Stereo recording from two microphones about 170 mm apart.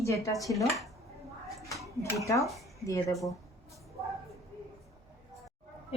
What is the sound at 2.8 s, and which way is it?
Speech, 20° left (ahead or behind).